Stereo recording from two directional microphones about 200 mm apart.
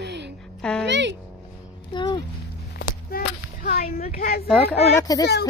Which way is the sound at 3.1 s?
45° left (ahead or behind).